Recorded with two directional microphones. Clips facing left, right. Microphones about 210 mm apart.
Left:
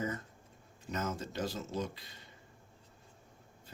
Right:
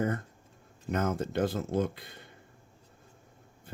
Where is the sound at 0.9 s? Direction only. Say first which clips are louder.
Right 7 dB; 55° right (ahead or behind).